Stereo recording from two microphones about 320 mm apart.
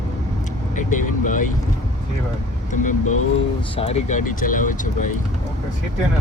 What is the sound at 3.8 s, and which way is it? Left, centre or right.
Speech, centre.